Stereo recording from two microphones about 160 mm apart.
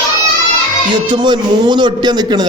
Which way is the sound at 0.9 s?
30° right (ahead or behind).